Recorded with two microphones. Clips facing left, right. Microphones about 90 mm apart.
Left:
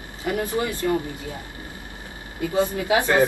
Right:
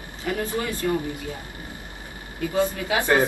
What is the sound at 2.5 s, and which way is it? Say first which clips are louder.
Speech: left 3 dB; 20° left (ahead or behind).